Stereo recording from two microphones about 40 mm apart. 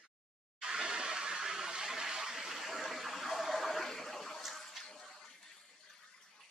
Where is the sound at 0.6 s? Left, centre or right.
Right; by 4.4 s centre.